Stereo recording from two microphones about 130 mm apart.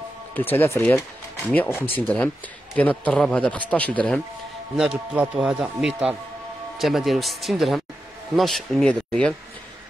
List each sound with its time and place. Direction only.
0.3 s a man's voice: 15° left (ahead or behind)
4.7 s speech: 10° right (ahead or behind)